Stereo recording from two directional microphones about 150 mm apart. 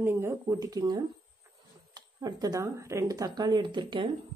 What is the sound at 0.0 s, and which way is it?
Speech, 15° right (ahead or behind).